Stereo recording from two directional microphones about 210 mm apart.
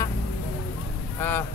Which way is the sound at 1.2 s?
10° left (ahead or behind).